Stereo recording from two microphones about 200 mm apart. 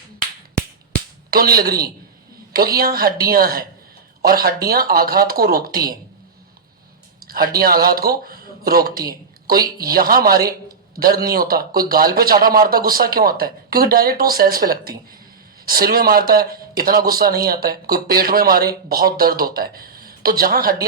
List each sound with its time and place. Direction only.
1.3 s a man's voice: 45° right (ahead or behind)
7.3 s a man's voice: 45° right (ahead or behind)